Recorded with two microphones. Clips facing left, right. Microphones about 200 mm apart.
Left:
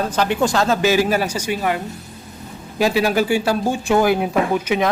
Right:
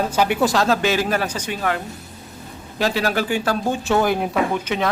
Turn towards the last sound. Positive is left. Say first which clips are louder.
# left 3 dB
turn(degrees=10)  # may be behind; listen again after turning